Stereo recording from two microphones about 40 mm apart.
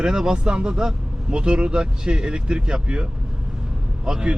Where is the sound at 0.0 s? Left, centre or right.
Centre.